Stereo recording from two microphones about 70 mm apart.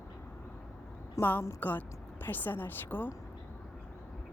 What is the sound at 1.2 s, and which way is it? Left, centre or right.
Speech, left.